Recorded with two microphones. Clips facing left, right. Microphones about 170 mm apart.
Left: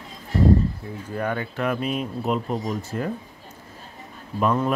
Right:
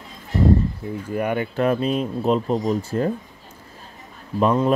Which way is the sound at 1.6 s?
30° right (ahead or behind).